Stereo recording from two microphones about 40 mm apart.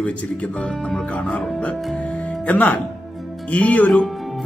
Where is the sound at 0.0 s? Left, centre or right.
Left.